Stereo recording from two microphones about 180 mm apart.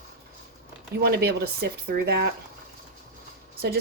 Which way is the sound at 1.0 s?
60° right (ahead or behind).